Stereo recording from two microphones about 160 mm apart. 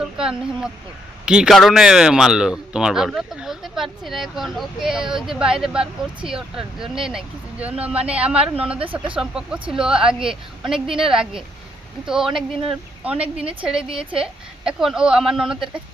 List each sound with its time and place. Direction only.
0.2 s speech: 5° right (ahead or behind)
13.8 s a woman's voice: 35° right (ahead or behind)
14.2 s speech: 5° right (ahead or behind)